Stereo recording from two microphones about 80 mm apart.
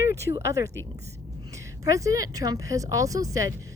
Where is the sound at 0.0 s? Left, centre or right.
Right.